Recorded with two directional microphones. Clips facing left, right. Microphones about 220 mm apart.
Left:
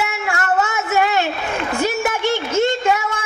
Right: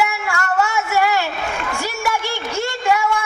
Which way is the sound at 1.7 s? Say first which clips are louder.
Left 5 dB; 20° left (ahead or behind).